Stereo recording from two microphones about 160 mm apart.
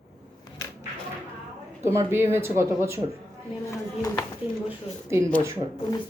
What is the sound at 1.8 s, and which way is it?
Speech, 15° right (ahead or behind).